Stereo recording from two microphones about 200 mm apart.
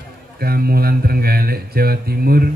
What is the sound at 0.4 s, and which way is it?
Speech, 50° right (ahead or behind).